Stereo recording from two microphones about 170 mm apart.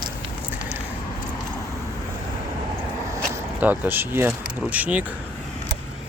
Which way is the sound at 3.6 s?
10° right (ahead or behind).